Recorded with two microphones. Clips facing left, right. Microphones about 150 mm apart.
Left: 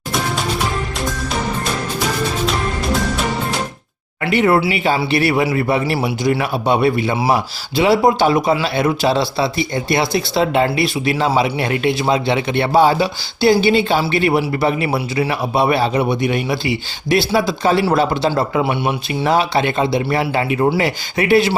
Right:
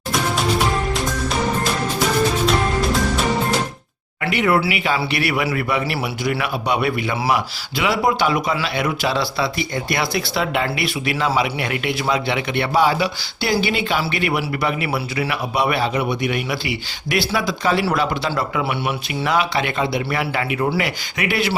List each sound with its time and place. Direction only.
4.2 s speech: 30° left (ahead or behind)